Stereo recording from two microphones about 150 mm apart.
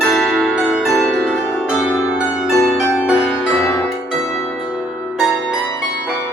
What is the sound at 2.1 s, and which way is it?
Pizzicato, 5° right (ahead or behind).